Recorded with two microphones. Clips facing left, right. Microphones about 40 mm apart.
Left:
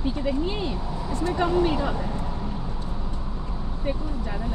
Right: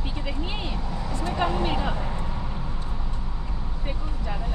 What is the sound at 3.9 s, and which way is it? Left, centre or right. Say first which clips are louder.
Vehicle: left 4 dB; right.